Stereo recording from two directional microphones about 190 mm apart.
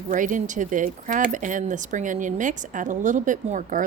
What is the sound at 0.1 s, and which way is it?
A woman's voice, 45° right (ahead or behind).